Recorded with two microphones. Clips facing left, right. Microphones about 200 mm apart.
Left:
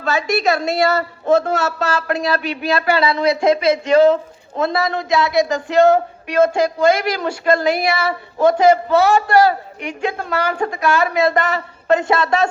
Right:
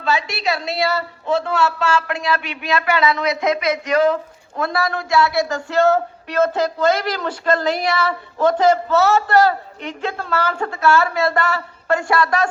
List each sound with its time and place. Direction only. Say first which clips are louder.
0.0 s a woman's voice: left 4 dB; 45° left (ahead or behind); by 12.5 s 25° left (ahead or behind)